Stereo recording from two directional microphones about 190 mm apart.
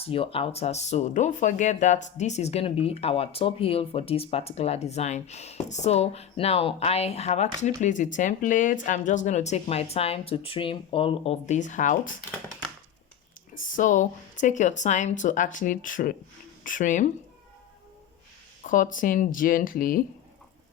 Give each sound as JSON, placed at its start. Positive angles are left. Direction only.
{"t": 0.0, "sound": "speech", "side_deg": 30}
{"t": 13.5, "sound": "speech", "side_deg": 45}
{"t": 18.6, "sound": "speech", "side_deg": 45}